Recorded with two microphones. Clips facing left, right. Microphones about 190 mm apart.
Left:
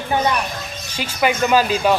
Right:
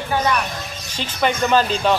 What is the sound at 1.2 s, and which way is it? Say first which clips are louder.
Speech: left 1 dB; 10° left (ahead or behind).